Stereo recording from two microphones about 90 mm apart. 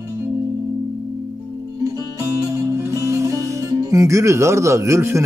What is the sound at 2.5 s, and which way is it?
Speech, 30° right (ahead or behind).